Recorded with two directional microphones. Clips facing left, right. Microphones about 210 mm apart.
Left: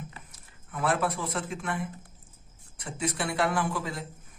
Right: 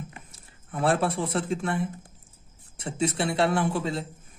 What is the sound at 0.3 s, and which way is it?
A woman's voice, 30° right (ahead or behind).